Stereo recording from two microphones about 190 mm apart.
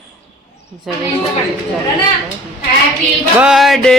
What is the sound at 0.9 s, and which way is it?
Speech, centre (ahead or behind).